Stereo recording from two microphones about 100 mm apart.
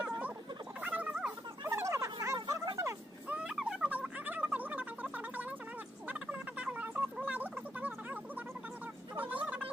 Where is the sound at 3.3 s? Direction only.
10° right (ahead or behind).